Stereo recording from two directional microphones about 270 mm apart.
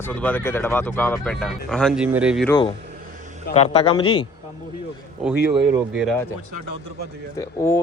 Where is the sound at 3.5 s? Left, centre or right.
Left.